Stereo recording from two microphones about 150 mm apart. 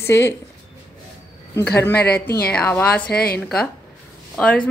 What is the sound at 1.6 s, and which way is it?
A woman's voice, 15° left (ahead or behind).